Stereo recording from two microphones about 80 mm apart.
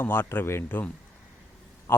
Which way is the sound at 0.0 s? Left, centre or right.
Left.